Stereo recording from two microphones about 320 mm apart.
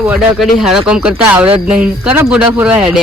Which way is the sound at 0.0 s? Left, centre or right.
Centre.